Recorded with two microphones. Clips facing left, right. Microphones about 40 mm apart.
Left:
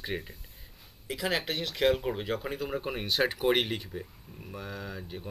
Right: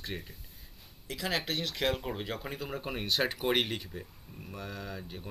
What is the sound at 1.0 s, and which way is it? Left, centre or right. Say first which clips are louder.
Speech: left 3 dB; centre.